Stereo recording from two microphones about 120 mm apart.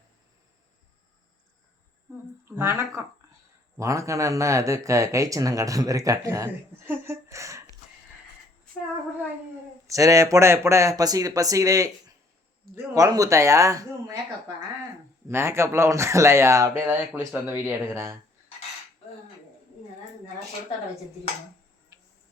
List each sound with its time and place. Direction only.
2.4 s speech: 20° right (ahead or behind)
9.9 s speech: 30° right (ahead or behind)
15.3 s speech: 20° right (ahead or behind)
21.9 s a sound: 25° right (ahead or behind)